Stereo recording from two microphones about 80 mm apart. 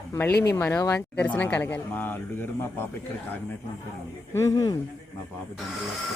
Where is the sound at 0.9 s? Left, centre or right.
Centre.